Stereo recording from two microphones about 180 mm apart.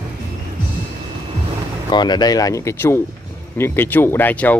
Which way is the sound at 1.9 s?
25° left (ahead or behind).